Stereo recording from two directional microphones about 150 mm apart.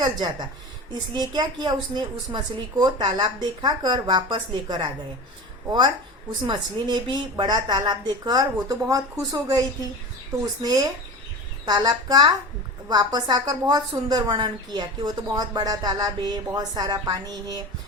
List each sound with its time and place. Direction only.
0.0 s a woman's voice: 30° right (ahead or behind)